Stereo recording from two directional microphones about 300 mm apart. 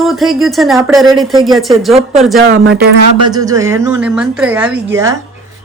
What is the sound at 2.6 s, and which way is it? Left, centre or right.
Speech, right.